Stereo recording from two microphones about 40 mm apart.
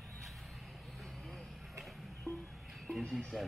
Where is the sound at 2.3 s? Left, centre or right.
Left.